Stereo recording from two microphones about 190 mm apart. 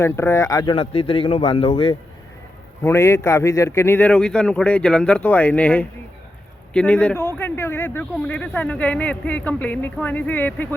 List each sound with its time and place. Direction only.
0.0 s speech: 15° left (ahead or behind); by 2.0 s 30° left (ahead or behind)
2.8 s speech: 15° left (ahead or behind)